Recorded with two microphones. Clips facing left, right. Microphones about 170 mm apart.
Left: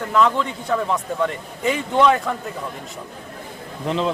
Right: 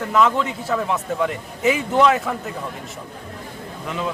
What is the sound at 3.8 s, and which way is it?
Speech, 25° left (ahead or behind).